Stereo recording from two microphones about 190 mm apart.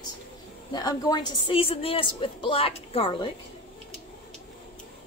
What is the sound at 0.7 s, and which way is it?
A woman's voice, 20° left (ahead or behind).